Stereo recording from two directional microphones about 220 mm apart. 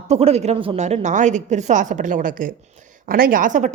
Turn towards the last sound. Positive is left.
turn(degrees=-35)  # may be behind; listen again after turning